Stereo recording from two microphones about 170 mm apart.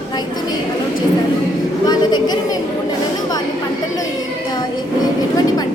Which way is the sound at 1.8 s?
25° left (ahead or behind).